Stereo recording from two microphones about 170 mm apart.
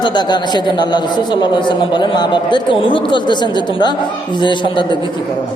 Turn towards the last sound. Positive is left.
turn(degrees=30)  # may be behind; listen again after turning